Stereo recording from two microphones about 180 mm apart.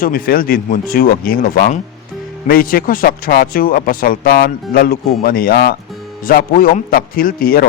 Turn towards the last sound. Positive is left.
turn(degrees=55)  # may be behind; listen again after turning